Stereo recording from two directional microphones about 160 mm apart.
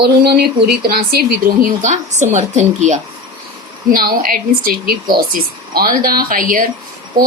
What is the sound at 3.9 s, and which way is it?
A woman's voice, 65° right (ahead or behind).